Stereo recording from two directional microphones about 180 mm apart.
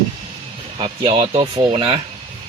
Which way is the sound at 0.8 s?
35° right (ahead or behind).